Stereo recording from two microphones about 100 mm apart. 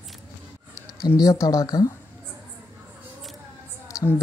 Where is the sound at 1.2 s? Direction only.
35° left (ahead or behind).